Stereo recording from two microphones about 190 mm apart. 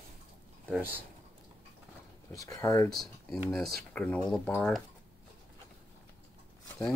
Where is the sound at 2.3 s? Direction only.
15° left (ahead or behind).